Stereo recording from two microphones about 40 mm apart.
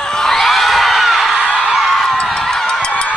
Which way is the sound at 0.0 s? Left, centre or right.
Centre.